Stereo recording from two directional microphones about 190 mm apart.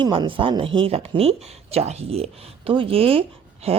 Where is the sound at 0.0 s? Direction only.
25° right (ahead or behind).